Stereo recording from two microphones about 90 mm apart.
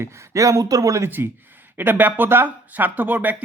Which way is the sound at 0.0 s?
35° right (ahead or behind).